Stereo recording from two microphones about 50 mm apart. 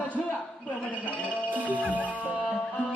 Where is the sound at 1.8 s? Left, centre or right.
Left.